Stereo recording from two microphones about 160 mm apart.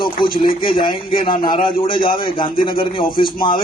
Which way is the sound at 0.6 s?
30° left (ahead or behind).